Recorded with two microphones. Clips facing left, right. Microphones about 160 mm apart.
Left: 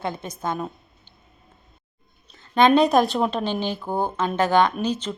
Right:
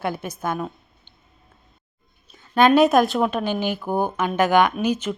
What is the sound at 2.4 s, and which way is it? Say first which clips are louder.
A woman's voice: right 1 dB; 5° right (ahead or behind).